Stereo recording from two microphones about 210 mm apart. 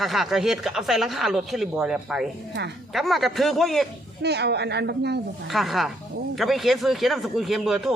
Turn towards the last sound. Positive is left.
turn(degrees=0)  # may be behind; listen again after turning